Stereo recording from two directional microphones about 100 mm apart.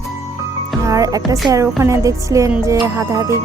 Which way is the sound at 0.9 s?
35° right (ahead or behind).